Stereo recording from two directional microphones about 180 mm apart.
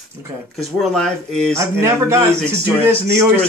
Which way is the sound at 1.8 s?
15° right (ahead or behind).